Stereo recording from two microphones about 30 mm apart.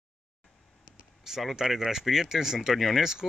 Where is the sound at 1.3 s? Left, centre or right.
Centre.